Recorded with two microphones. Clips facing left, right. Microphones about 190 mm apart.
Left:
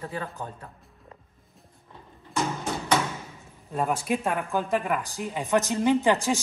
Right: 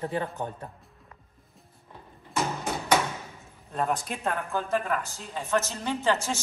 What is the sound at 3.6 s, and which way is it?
Speech, 5° left (ahead or behind).